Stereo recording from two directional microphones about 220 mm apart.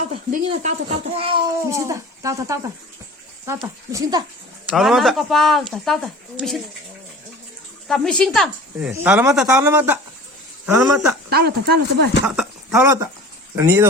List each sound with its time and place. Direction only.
0.0 s speech: 35° right (ahead or behind)
1.6 s a man's voice: 15° right (ahead or behind)
4.7 s speech: centre (ahead or behind)
7.9 s a man's voice: centre (ahead or behind)
11.3 s speech: 45° right (ahead or behind)
12.2 s a man's voice: 5° right (ahead or behind)